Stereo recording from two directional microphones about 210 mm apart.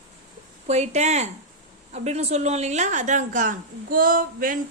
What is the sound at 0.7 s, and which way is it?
A woman's voice, 35° right (ahead or behind).